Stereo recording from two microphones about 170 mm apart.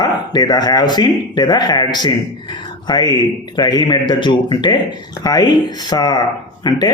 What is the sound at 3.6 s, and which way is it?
Speech, 25° left (ahead or behind).